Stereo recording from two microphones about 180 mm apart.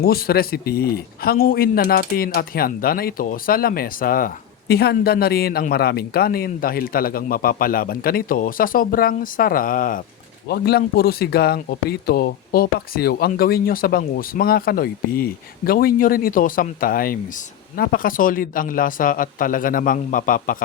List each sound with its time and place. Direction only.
0.0 s a man's voice: 55° left (ahead or behind)
10.5 s a man's voice: 60° left (ahead or behind)